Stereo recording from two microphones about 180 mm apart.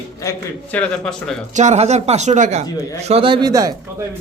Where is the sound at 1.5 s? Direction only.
40° right (ahead or behind); by 3.7 s 20° right (ahead or behind).